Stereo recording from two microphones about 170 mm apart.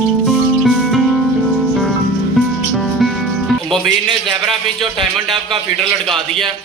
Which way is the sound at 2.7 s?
Centre (ahead or behind).